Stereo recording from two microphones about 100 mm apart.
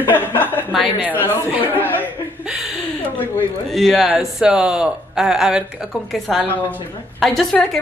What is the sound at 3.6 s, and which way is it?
Speech, centre (ahead or behind).